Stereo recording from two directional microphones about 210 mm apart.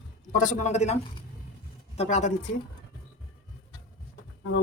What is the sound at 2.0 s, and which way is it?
Speech, 35° left (ahead or behind).